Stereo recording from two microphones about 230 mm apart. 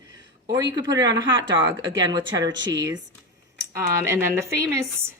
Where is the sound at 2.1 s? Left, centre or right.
Centre.